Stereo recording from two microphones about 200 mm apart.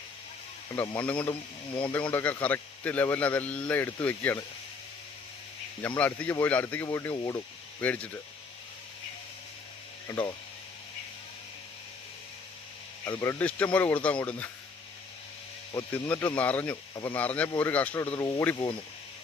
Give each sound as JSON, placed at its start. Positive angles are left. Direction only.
{"t": 0.8, "sound": "speech", "side_deg": 10}
{"t": 6.0, "sound": "speech", "side_deg": 10}
{"t": 10.1, "sound": "speech", "side_deg": 15}
{"t": 13.2, "sound": "speech", "side_deg": 5}
{"t": 15.7, "sound": "speech", "side_deg": 10}
{"t": 16.9, "sound": "speech", "side_deg": 20}
{"t": 17.2, "sound": "speech", "side_deg": 5}